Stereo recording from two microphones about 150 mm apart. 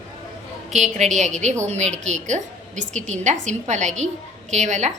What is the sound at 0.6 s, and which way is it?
A woman's voice, 50° right (ahead or behind).